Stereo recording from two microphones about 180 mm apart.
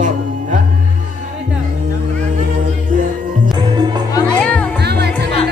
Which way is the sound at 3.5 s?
25° right (ahead or behind).